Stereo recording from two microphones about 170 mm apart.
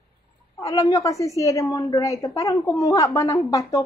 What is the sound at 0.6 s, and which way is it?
A woman's voice, 20° left (ahead or behind).